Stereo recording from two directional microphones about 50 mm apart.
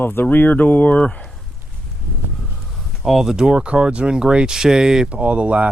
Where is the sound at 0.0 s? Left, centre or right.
Left.